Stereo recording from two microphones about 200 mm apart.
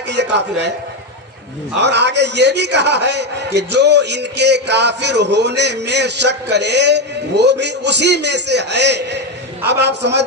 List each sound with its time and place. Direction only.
0.1 s a man's voice: 60° right (ahead or behind)
1.8 s a man's voice: 60° right (ahead or behind)